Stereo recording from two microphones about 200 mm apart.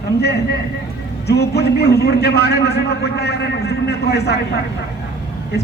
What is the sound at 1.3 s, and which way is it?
A man's voice, 55° left (ahead or behind).